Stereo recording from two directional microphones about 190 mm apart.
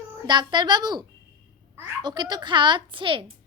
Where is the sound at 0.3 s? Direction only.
25° right (ahead or behind).